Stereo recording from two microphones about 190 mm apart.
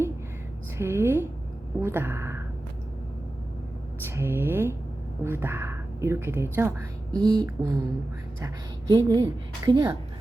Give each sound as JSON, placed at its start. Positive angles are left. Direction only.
{"t": 0.8, "sound": "speech", "side_deg": -15}
{"t": 4.1, "sound": "speech", "side_deg": -10}
{"t": 8.9, "sound": "a woman's voice", "side_deg": -20}